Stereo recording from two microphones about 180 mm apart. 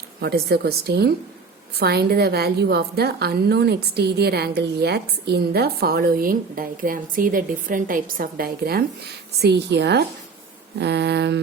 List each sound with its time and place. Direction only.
0.2 s a woman's voice: 60° right (ahead or behind)
9.4 s a woman's voice: 70° right (ahead or behind)